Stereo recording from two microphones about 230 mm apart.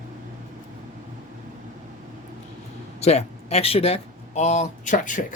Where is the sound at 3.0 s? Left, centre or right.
Left.